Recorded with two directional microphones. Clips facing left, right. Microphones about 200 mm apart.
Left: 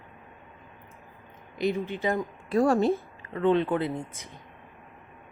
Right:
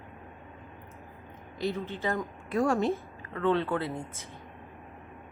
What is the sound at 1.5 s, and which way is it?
Speech, 15° left (ahead or behind).